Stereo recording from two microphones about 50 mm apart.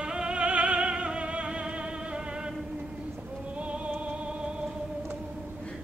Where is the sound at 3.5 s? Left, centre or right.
Right.